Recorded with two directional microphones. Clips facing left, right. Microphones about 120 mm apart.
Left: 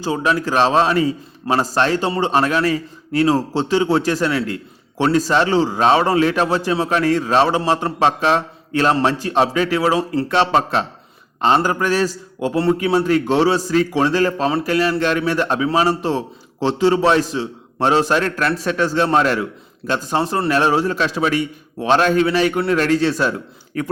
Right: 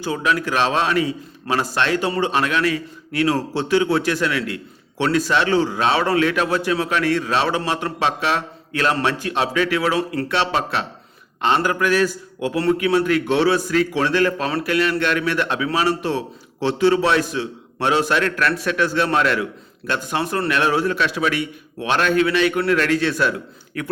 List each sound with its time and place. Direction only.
0.0 s a man's voice: 35° left (ahead or behind)